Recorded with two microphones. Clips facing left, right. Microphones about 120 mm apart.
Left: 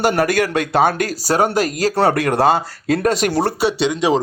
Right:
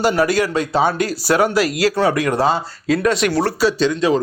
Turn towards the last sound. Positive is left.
turn(degrees=20)  # may be behind; listen again after turning